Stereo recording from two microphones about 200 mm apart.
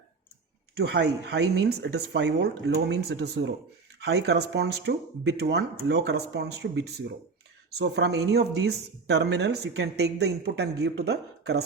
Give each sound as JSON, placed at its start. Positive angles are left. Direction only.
{"t": 0.8, "sound": "speech", "side_deg": -55}